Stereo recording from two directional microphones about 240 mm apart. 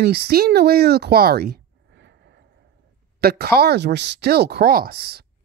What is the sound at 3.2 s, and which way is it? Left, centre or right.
Speech, right.